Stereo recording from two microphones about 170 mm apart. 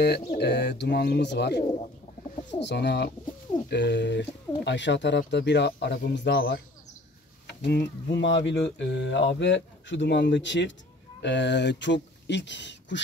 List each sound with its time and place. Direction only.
0.3 s speech: 80° left
2.6 s speech: 80° left
3.7 s speech: 90° left
7.6 s speech: 90° left